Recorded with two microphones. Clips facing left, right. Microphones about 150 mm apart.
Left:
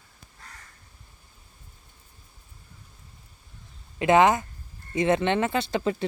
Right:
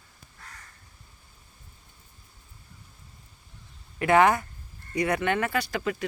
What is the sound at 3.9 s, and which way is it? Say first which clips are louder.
Speech: left 1 dB; 20° left (ahead or behind).